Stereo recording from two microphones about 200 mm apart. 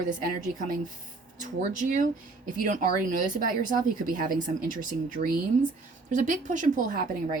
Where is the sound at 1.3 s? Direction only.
40° right (ahead or behind).